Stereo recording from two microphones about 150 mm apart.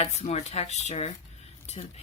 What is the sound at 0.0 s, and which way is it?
Speech, 45° left (ahead or behind).